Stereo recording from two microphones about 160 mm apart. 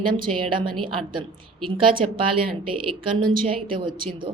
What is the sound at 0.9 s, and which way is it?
A woman's voice, 30° right (ahead or behind).